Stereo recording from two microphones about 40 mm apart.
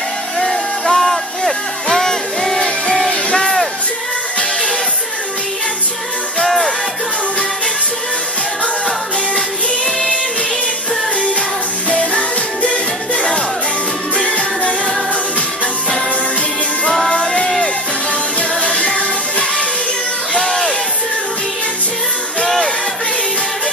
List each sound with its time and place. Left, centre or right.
0.4 s music: centre
6.4 s music: centre
11.9 s music: left
17.1 s a sound: left
18.6 s music: left
20.3 s a sound: centre
22.4 s music: centre